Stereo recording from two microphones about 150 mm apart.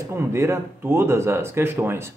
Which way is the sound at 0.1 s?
15° right (ahead or behind).